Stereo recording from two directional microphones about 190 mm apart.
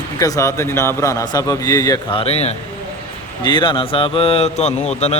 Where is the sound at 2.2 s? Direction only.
35° left (ahead or behind).